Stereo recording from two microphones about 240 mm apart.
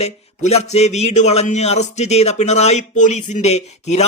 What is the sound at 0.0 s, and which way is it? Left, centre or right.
A man's voice, left.